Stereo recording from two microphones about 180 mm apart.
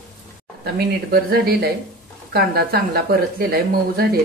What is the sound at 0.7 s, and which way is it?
A woman's voice, 60° right (ahead or behind).